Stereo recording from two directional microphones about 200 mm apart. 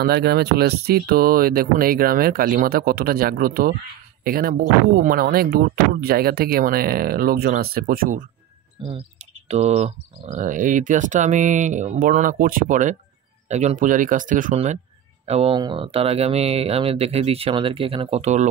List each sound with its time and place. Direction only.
0.0 s speech: 55° right (ahead or behind)
8.8 s speech: 35° right (ahead or behind)